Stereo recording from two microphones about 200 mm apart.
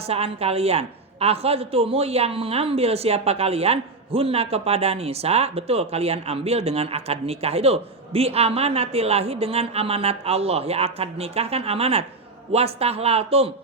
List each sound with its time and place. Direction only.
0.0 s a woman's voice: 30° right (ahead or behind)